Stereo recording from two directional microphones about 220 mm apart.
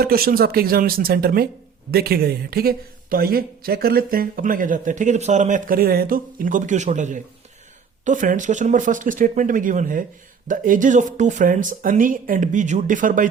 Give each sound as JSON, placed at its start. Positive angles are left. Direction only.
{"t": 0.0, "sound": "speech", "side_deg": -45}